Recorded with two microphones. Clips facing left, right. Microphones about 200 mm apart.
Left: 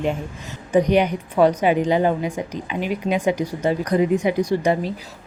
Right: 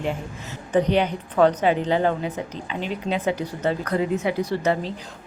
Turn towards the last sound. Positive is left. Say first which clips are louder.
# left 3 dB
turn(degrees=10)  # may be behind; listen again after turning